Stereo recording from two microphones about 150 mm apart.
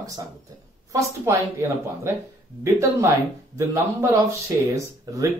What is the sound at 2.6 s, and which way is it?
Speech, 20° right (ahead or behind).